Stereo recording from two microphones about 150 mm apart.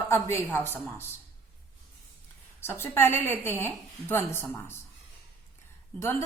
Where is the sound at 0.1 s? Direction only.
15° left (ahead or behind).